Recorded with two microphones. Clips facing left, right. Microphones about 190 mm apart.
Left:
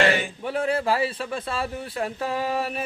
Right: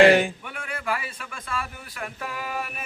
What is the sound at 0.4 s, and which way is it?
Speech, 30° left (ahead or behind).